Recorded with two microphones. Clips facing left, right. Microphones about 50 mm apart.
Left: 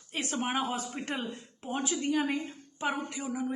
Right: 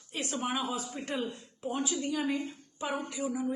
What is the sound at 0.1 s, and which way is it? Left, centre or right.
A woman's voice, left.